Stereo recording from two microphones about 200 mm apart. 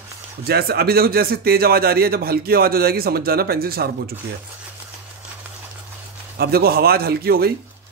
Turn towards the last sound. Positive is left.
turn(degrees=-50)  # may be behind; listen again after turning